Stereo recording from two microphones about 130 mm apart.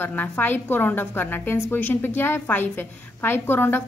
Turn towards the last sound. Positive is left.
turn(degrees=15)  # may be behind; listen again after turning